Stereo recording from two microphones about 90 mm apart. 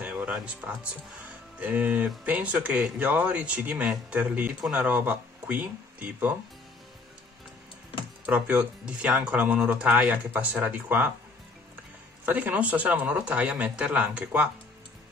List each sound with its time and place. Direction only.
0.0 s speech: 10° right (ahead or behind)
8.3 s speech: 10° right (ahead or behind)
12.3 s speech: 20° right (ahead or behind)